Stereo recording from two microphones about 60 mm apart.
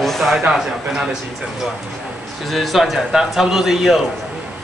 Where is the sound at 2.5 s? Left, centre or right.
Centre.